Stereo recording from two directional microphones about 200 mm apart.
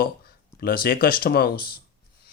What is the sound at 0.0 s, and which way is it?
Speech, 50° left (ahead or behind).